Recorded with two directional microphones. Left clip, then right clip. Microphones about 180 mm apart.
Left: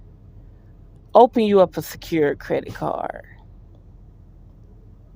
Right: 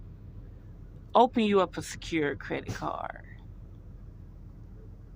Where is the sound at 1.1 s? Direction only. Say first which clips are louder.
Left 9 dB; 35° left (ahead or behind).